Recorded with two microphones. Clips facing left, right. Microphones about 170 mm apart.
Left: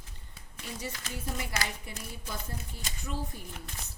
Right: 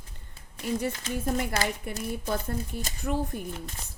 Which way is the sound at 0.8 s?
55° right (ahead or behind).